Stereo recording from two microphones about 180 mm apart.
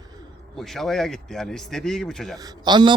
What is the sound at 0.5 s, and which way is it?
A man's voice, centre (ahead or behind).